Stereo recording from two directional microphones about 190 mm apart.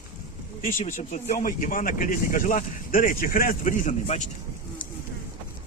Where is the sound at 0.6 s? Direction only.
35° left (ahead or behind).